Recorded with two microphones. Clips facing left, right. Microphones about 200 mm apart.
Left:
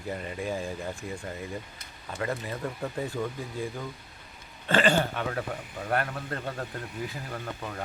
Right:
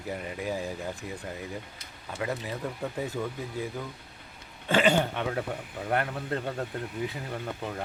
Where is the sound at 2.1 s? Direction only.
5° right (ahead or behind).